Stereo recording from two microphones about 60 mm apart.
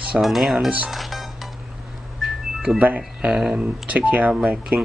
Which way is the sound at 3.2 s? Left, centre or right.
Centre.